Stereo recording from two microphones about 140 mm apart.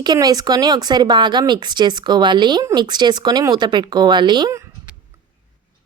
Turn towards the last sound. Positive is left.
turn(degrees=-30)  # may be behind; listen again after turning